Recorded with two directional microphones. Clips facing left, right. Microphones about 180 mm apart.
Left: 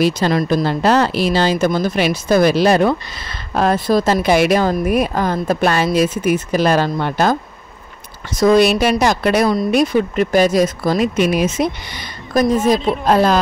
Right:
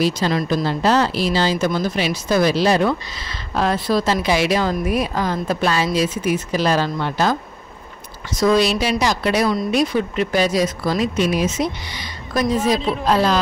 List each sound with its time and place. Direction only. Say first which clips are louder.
0.0 s speech: left 4 dB; 50° left (ahead or behind)
8.4 s speech: left 4 dB; 55° left (ahead or behind)